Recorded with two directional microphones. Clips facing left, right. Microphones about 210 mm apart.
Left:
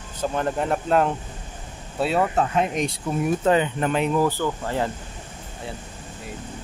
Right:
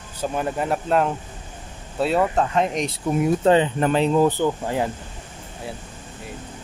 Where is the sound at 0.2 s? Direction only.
10° right (ahead or behind).